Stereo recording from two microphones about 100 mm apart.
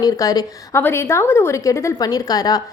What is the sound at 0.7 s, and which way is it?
A woman's voice, 25° left (ahead or behind).